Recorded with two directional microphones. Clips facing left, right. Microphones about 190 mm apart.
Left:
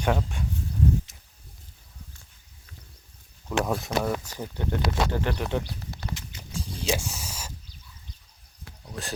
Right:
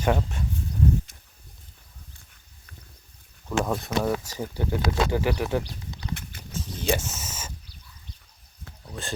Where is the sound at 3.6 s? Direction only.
Centre (ahead or behind).